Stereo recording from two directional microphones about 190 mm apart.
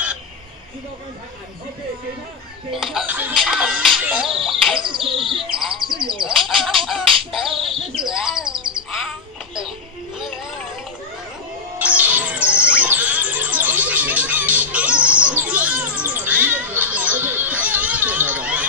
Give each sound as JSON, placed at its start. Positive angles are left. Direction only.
{"t": 2.7, "sound": "speech", "side_deg": 0}
{"t": 4.8, "sound": "a sound", "side_deg": -30}
{"t": 5.2, "sound": "bird", "side_deg": 0}
{"t": 6.1, "sound": "chicken", "side_deg": 0}
{"t": 7.6, "sound": "bird vocalization", "side_deg": 0}
{"t": 10.2, "sound": "a sound", "side_deg": -5}
{"t": 11.8, "sound": "bird", "side_deg": -10}